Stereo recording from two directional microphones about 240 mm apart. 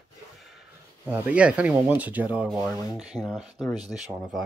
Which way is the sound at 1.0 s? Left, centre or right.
Centre.